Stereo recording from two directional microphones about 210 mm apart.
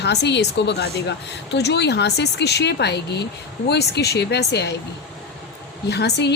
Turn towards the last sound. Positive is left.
turn(degrees=55)  # may be behind; listen again after turning